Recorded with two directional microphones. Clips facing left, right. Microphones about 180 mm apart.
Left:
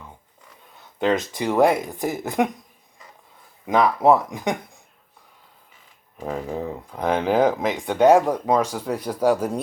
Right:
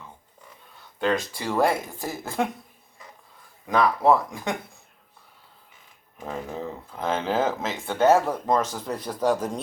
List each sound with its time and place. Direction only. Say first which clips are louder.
0.9 s speech: left 4 dB; 20° left (ahead or behind)
3.7 s speech: left 3 dB; 20° left (ahead or behind)
6.2 s speech: left 5 dB; 10° left (ahead or behind)